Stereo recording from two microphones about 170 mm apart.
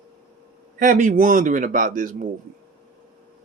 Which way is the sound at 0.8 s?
50° right (ahead or behind).